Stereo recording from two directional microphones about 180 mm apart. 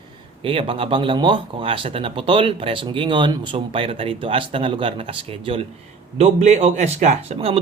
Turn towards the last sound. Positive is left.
turn(degrees=-35)  # may be behind; listen again after turning